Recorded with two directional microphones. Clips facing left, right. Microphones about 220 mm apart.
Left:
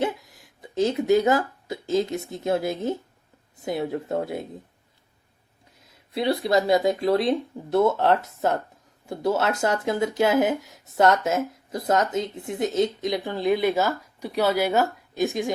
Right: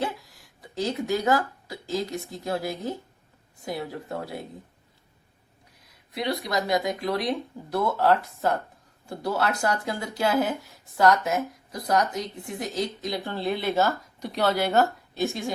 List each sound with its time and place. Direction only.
0.0 s speech: 20° left (ahead or behind)
5.8 s speech: 30° left (ahead or behind)